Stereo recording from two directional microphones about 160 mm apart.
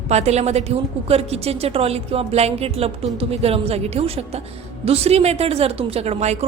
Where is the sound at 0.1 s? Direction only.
45° right (ahead or behind).